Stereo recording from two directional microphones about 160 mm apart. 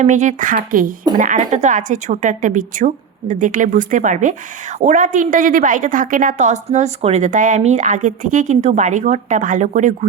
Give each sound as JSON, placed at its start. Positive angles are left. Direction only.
{"t": 0.0, "sound": "a woman's voice", "side_deg": -50}